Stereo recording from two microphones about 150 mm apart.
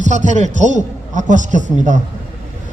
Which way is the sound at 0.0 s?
55° right (ahead or behind).